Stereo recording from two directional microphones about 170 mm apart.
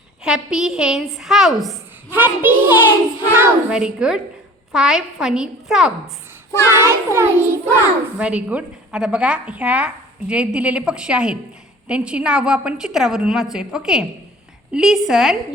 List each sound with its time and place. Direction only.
0.3 s a woman's voice: 5° right (ahead or behind)
2.0 s a woman's voice: 10° right (ahead or behind)
6.7 s a woman's voice: 15° right (ahead or behind)